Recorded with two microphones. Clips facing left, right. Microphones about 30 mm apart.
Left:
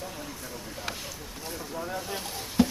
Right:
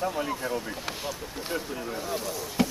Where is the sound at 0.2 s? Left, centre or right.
Right.